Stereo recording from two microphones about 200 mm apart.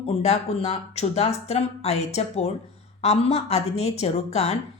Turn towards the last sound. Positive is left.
turn(degrees=30)  # may be behind; listen again after turning